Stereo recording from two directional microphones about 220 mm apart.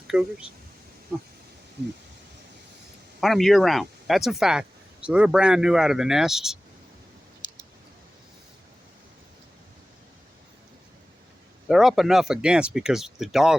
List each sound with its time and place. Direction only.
0.1 s speech: 5° right (ahead or behind)
3.2 s speech: centre (ahead or behind)
7.4 s clicking: 20° left (ahead or behind)
11.7 s speech: centre (ahead or behind)